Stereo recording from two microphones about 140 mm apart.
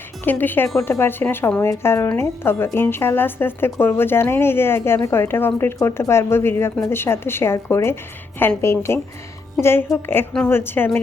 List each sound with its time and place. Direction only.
0.3 s speech: 15° left (ahead or behind)